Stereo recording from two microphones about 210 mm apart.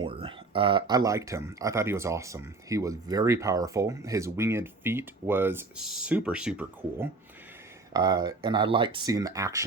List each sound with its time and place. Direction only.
0.0 s speech: 25° right (ahead or behind); by 7.1 s 5° right (ahead or behind)
7.9 s speech: 20° right (ahead or behind)